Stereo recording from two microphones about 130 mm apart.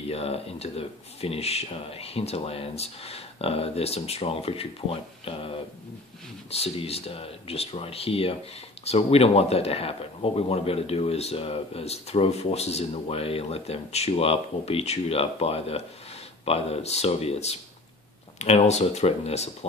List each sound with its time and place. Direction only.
0.1 s a man's voice: 50° left (ahead or behind)